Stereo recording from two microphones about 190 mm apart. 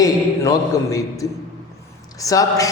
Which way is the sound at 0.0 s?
20° left (ahead or behind).